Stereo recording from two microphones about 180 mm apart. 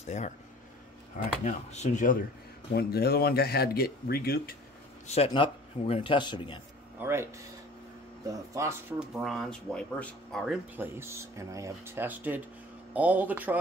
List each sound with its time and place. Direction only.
0.0 s speech: 40° left (ahead or behind)
1.4 s speech: 40° left (ahead or behind)
2.7 s speech: 60° left (ahead or behind)
5.0 s a man's voice: 35° left (ahead or behind)
7.0 s speech: 15° right (ahead or behind)
8.3 s speech: 15° right (ahead or behind)
9.0 s speech: centre (ahead or behind)
11.0 s speech: 15° right (ahead or behind)